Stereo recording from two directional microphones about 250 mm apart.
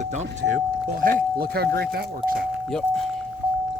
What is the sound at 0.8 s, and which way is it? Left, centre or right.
Speech, right.